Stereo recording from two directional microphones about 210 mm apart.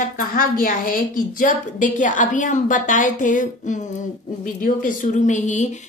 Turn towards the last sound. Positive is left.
turn(degrees=35)  # may be behind; listen again after turning